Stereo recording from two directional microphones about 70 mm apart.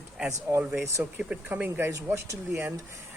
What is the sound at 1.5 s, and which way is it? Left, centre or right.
Speech, right.